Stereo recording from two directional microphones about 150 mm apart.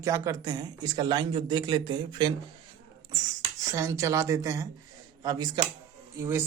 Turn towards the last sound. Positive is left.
turn(degrees=-15)  # may be behind; listen again after turning